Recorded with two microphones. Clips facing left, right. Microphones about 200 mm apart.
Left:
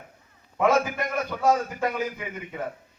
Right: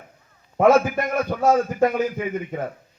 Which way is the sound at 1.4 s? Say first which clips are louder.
Right 5 dB; 45° right (ahead or behind).